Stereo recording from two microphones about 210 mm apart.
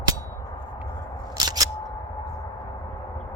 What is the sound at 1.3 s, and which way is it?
Scissors, 20° right (ahead or behind).